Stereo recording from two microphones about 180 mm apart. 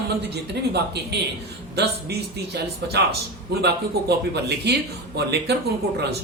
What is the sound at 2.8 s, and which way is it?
Speech, 65° right (ahead or behind).